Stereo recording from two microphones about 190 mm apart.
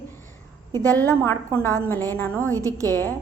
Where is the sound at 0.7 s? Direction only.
20° right (ahead or behind).